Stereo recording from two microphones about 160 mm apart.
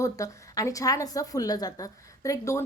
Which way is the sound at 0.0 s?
20° left (ahead or behind).